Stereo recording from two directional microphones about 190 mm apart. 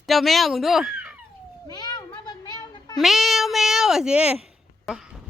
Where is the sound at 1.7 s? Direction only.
20° left (ahead or behind).